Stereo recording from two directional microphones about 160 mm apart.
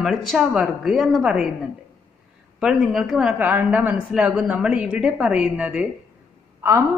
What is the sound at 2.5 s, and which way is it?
A woman's voice, 5° right (ahead or behind).